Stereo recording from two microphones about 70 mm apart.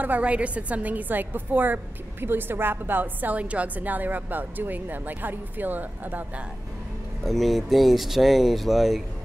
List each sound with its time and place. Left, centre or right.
0.0 s a woman's voice: right
7.2 s speech: centre